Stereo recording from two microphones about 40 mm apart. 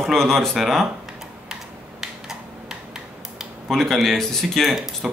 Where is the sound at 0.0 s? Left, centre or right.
Centre.